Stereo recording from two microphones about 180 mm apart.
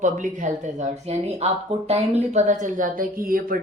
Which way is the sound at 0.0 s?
45° right (ahead or behind).